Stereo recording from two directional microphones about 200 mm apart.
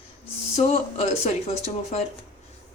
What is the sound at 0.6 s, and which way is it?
Speech, 30° left (ahead or behind).